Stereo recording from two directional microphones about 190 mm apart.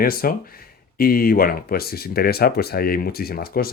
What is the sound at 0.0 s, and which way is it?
Speech, 50° left (ahead or behind).